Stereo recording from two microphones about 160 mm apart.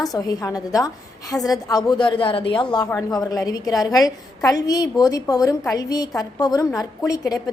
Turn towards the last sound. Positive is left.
turn(degrees=20)  # may be behind; listen again after turning